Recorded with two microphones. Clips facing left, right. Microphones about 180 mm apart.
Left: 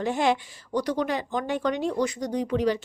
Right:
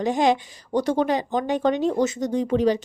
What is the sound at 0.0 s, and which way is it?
A woman's voice, 20° right (ahead or behind).